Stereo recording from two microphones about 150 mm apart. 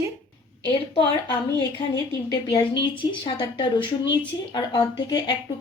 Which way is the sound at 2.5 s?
30° left (ahead or behind).